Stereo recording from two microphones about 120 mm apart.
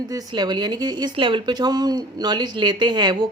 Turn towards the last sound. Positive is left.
turn(degrees=-35)  # may be behind; listen again after turning